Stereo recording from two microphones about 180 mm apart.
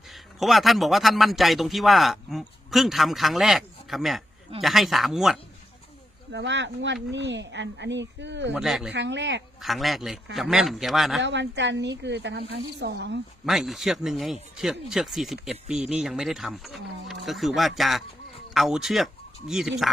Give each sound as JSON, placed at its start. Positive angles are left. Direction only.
{"t": 0.1, "sound": "a man's voice", "side_deg": 0}
{"t": 6.3, "sound": "speech", "side_deg": -85}
{"t": 8.5, "sound": "a man's voice", "side_deg": 0}
{"t": 8.9, "sound": "speech", "side_deg": -80}
{"t": 9.6, "sound": "a man's voice", "side_deg": 0}
{"t": 11.2, "sound": "speech", "side_deg": -80}
{"t": 13.4, "sound": "a man's voice", "side_deg": 0}